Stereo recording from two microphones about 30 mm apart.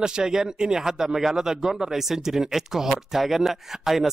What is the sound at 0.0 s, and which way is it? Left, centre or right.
Speech, right.